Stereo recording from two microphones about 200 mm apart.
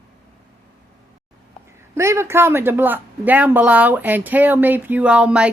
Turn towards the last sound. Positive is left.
turn(degrees=-5)  # may be behind; listen again after turning